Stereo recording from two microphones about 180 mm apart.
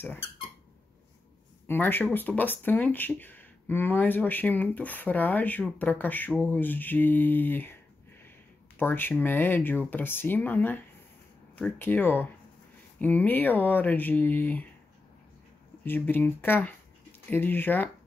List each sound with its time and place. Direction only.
1.7 s speech: 10° left (ahead or behind)
15.8 s speech: 10° left (ahead or behind)